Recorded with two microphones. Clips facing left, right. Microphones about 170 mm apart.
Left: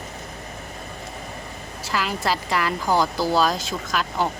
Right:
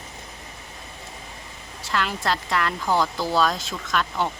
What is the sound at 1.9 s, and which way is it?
Speech, 5° left (ahead or behind).